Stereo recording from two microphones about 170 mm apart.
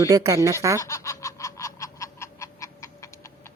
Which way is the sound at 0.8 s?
15° left (ahead or behind).